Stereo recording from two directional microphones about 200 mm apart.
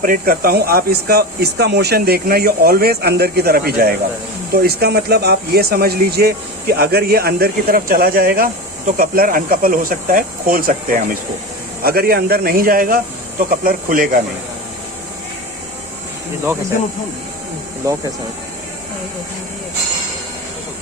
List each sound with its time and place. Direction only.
0.0 s speech: 45° right (ahead or behind)